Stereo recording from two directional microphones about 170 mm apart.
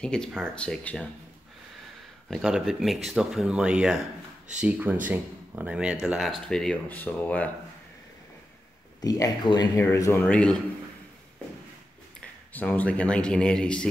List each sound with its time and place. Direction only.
0.0 s speech: 5° left (ahead or behind)
2.2 s speech: centre (ahead or behind)
9.0 s speech: 20° left (ahead or behind)
10.2 s speech: 5° left (ahead or behind)
12.5 s speech: 10° left (ahead or behind)